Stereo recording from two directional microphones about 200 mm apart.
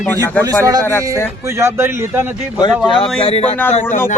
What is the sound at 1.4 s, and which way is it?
A man's voice, 15° right (ahead or behind).